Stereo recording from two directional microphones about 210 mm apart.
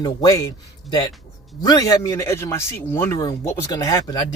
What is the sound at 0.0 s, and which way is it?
Speech, 15° left (ahead or behind).